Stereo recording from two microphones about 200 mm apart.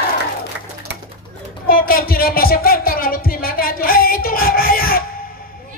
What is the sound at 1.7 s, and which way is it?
Music, 45° left (ahead or behind).